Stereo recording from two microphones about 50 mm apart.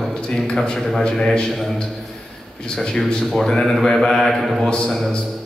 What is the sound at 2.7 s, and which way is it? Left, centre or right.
A man's voice, centre.